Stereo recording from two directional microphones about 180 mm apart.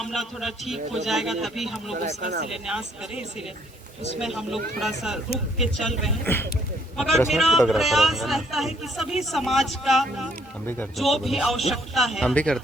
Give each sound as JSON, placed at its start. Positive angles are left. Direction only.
{"t": 0.0, "sound": "a man's voice", "side_deg": 0}
{"t": 1.9, "sound": "speech", "side_deg": -40}
{"t": 2.6, "sound": "a man's voice", "side_deg": -5}
{"t": 6.2, "sound": "speech", "side_deg": 10}
{"t": 6.9, "sound": "a man's voice", "side_deg": 0}